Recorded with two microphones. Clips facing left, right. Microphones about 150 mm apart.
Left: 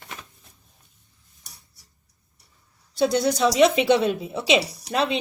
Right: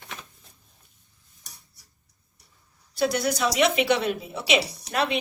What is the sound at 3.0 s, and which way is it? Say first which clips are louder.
A woman's voice: left 4 dB; 25° left (ahead or behind).